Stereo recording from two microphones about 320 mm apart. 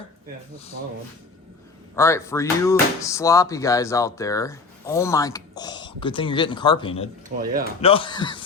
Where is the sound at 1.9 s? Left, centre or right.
Centre.